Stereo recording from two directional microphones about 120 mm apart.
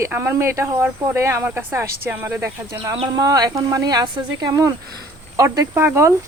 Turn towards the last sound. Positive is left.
turn(degrees=-20)  # may be behind; listen again after turning